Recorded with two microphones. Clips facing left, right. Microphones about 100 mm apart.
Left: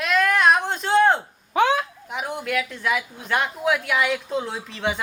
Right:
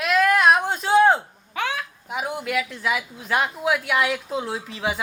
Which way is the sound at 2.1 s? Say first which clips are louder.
Right 3 dB; centre (ahead or behind).